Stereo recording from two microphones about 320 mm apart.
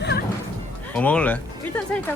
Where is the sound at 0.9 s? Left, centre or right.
Centre.